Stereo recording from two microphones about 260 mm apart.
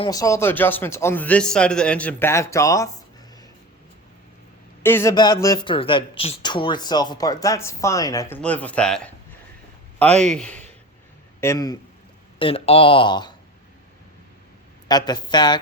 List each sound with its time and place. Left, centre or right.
0.0 s speech: centre
4.8 s speech: centre
10.3 s a man's voice: centre
14.8 s speech: centre